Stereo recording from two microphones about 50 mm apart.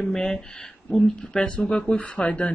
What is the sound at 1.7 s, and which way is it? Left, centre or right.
Speech, left.